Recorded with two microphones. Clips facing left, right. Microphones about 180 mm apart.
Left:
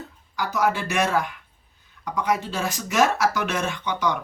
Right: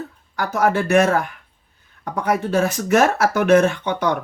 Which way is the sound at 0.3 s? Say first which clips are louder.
Right 5 dB; 55° right (ahead or behind).